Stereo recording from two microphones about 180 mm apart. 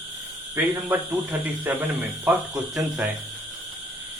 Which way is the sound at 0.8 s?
10° right (ahead or behind).